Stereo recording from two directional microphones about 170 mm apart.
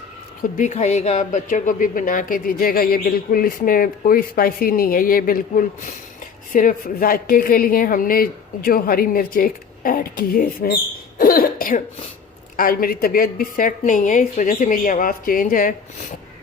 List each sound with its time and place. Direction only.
0.5 s speech: 45° left (ahead or behind); by 10.7 s 60° left (ahead or behind)
11.2 s cough: 55° left (ahead or behind)
12.5 s a woman's voice: 60° left (ahead or behind)